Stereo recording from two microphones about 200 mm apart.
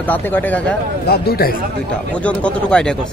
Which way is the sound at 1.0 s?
50° left (ahead or behind).